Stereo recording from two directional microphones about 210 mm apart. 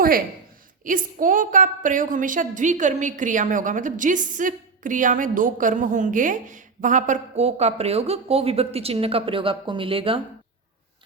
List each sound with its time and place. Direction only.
0.9 s a woman's voice: 40° right (ahead or behind)